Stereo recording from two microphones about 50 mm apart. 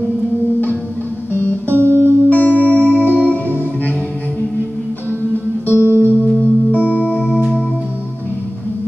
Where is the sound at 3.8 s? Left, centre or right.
Left.